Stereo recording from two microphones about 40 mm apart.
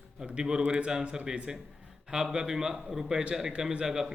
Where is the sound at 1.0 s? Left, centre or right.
Centre.